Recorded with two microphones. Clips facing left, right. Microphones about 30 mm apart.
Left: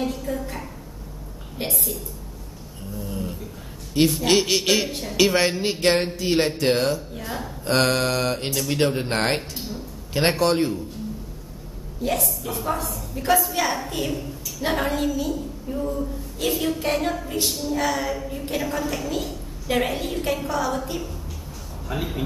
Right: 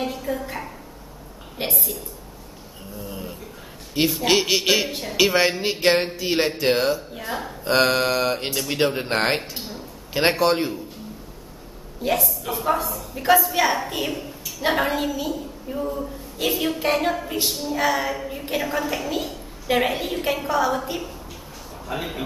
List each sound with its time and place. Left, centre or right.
0.0 s a woman's voice: centre
3.1 s a sound: centre
3.9 s a woman's voice: centre
12.2 s a woman's voice: centre